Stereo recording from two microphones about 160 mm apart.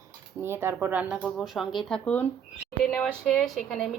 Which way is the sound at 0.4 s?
15° right (ahead or behind).